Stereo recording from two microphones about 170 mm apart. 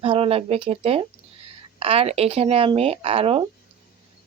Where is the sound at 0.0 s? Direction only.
35° right (ahead or behind).